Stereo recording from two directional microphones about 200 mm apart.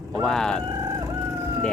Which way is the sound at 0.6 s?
15° right (ahead or behind).